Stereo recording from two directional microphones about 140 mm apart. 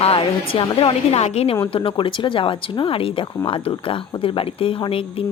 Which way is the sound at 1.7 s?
40° left (ahead or behind).